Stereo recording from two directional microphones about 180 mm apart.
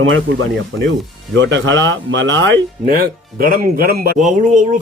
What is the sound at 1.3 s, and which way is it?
Speech, 90° right.